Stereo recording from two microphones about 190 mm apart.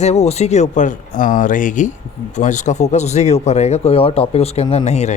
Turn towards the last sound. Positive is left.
turn(degrees=35)  # may be behind; listen again after turning